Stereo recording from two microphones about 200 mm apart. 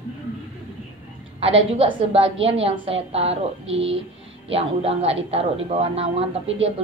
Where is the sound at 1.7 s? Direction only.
30° right (ahead or behind).